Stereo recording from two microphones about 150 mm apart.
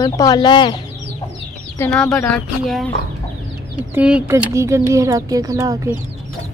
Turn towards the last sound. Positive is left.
turn(degrees=-20)  # may be behind; listen again after turning